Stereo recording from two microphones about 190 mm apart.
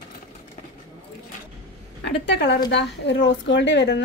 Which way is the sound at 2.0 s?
60° left (ahead or behind).